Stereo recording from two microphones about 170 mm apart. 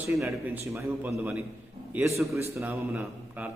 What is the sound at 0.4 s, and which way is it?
A man's voice, 10° right (ahead or behind).